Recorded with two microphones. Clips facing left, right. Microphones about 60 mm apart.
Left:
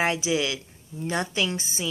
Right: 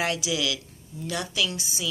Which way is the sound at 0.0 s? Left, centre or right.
Left.